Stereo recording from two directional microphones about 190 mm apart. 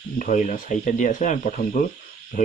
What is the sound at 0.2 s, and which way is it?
Speech, 40° left (ahead or behind).